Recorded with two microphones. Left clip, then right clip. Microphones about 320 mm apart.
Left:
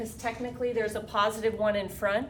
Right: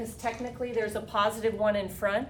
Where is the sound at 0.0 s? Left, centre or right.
Centre.